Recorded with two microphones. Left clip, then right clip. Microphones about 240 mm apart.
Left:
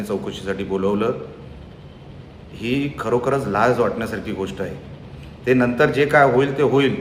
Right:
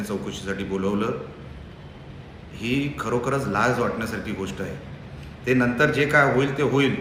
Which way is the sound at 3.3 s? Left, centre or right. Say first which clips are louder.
Left 4 dB; centre.